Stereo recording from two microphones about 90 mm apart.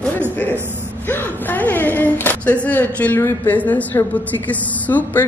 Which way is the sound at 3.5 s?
15° left (ahead or behind).